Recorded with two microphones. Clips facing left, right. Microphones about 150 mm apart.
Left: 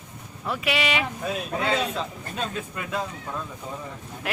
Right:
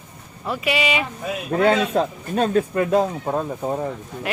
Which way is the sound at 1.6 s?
50° right (ahead or behind).